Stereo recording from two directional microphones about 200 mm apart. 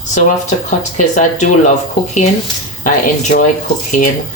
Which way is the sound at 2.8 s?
40° left (ahead or behind).